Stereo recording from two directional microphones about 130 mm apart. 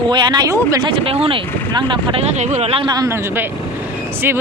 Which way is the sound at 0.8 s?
45° right (ahead or behind).